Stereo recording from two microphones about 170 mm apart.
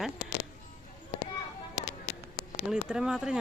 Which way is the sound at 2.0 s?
90° left.